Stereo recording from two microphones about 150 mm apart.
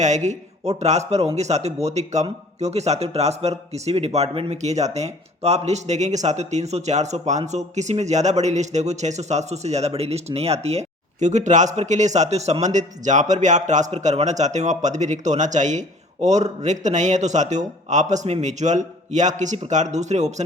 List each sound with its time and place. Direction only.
0.0 s speech: 50° right (ahead or behind)